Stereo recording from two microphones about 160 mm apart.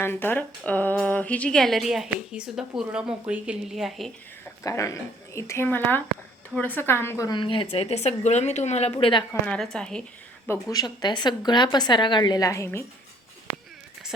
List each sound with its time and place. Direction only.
0.0 s speech: 15° left (ahead or behind)
4.4 s speech: 20° left (ahead or behind)
7.3 s speech: 30° left (ahead or behind)
9.7 s speech: 5° left (ahead or behind)
10.5 s a woman's voice: 25° left (ahead or behind)